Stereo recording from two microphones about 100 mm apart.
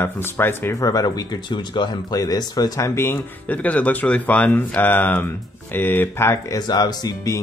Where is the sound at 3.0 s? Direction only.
20° left (ahead or behind).